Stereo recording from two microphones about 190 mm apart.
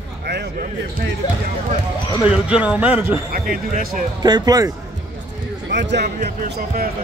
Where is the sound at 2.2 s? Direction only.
5° right (ahead or behind).